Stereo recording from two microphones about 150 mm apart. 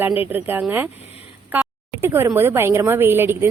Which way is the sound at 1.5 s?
15° right (ahead or behind).